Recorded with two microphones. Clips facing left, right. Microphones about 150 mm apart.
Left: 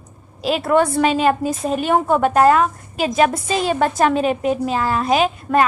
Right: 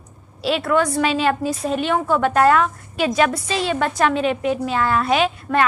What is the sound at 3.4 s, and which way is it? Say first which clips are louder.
A woman's voice: left 3 dB; 50° left (ahead or behind).